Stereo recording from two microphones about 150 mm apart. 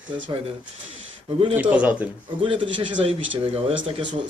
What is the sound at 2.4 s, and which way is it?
Speech, 35° right (ahead or behind).